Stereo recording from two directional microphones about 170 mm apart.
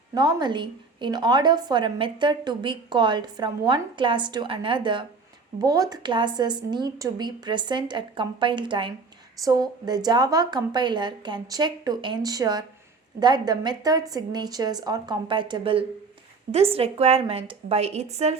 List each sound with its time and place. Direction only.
0.1 s a woman's voice: 25° right (ahead or behind); by 18.3 s 40° right (ahead or behind)